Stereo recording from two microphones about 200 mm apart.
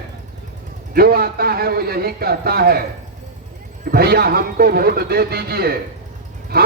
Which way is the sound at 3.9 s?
50° right (ahead or behind).